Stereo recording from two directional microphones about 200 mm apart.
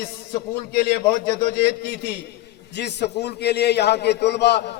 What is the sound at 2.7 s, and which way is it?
A man's voice, 55° left (ahead or behind).